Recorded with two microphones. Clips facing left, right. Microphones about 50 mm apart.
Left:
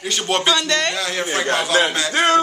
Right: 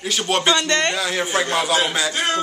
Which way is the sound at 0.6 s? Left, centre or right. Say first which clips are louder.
Even; right.